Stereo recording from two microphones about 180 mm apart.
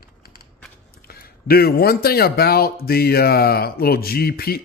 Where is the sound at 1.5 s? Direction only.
60° left (ahead or behind).